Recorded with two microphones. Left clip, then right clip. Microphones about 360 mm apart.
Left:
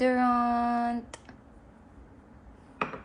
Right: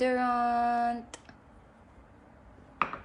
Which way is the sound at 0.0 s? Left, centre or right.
Centre.